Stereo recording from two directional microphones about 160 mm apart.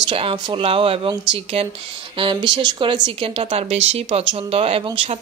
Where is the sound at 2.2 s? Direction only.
30° right (ahead or behind).